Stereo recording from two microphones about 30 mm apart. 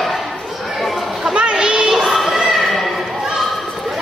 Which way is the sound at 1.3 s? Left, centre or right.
Right.